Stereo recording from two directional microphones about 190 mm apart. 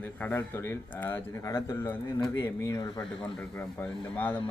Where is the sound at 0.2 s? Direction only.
10° left (ahead or behind).